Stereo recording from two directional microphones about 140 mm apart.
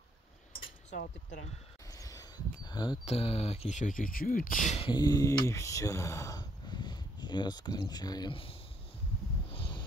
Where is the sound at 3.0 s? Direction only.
45° left (ahead or behind); by 4.7 s 75° left (ahead or behind).